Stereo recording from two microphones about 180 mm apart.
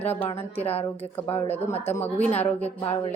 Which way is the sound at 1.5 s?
10° left (ahead or behind).